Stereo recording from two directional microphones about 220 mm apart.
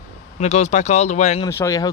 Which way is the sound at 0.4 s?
30° left (ahead or behind).